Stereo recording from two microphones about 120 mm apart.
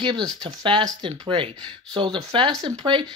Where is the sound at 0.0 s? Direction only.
35° right (ahead or behind).